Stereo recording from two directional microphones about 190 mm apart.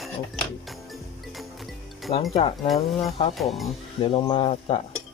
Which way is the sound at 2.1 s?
35° left (ahead or behind).